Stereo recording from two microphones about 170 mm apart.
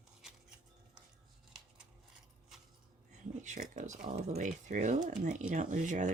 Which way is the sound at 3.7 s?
45° right (ahead or behind).